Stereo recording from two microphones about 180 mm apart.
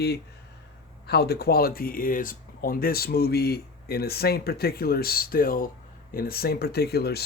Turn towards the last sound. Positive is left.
turn(degrees=65)  # may be behind; listen again after turning